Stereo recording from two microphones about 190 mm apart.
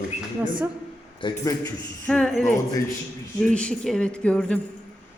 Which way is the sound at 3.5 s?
5° left (ahead or behind).